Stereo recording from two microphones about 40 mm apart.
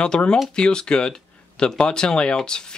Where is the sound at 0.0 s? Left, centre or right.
Left.